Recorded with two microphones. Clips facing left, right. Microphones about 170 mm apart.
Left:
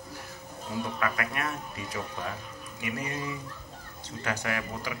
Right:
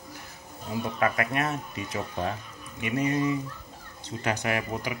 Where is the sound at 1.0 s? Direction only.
25° right (ahead or behind).